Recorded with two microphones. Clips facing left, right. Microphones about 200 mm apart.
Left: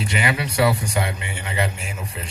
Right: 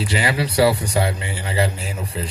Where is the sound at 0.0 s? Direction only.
30° right (ahead or behind).